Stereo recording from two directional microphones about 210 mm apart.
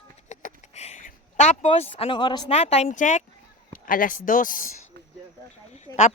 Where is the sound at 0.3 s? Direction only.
35° left (ahead or behind).